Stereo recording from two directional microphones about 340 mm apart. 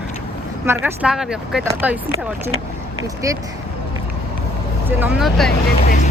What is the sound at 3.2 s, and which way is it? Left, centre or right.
Speech, centre.